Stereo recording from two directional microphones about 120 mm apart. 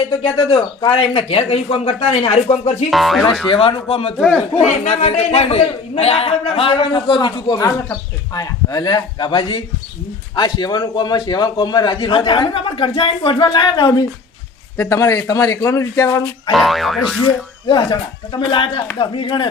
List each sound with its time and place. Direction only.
0.2 s a man's voice: 45° left (ahead or behind)
2.9 s boing: centre (ahead or behind)
3.5 s a man's voice: 50° left (ahead or behind)
4.2 s speech: 5° left (ahead or behind)
4.7 s a man's voice: 70° left (ahead or behind); by 14.1 s 40° left (ahead or behind)
14.8 s speech: 25° left (ahead or behind)
16.5 s boing: centre (ahead or behind)
17.7 s a man's voice: 40° left (ahead or behind)